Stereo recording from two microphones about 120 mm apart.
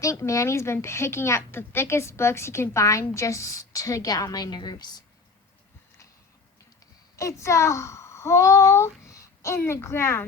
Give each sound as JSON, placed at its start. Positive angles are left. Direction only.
{"t": 0.0, "sound": "speech", "side_deg": 25}
{"t": 7.2, "sound": "a child's voice", "side_deg": 25}